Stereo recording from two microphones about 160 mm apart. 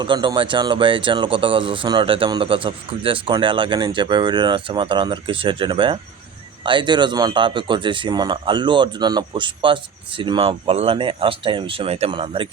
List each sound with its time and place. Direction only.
0.0 s speech: 30° right (ahead or behind)